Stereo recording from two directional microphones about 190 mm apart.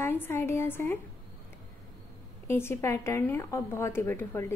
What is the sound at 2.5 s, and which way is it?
A woman's voice, 15° left (ahead or behind).